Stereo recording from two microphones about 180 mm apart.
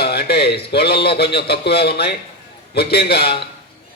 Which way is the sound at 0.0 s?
60° left (ahead or behind).